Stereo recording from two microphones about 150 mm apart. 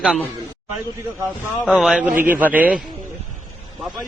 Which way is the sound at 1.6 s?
Centre (ahead or behind).